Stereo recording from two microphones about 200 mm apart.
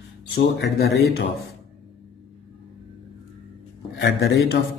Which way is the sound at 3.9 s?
55° left (ahead or behind).